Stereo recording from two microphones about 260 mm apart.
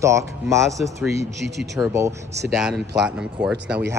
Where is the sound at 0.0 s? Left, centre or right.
Centre.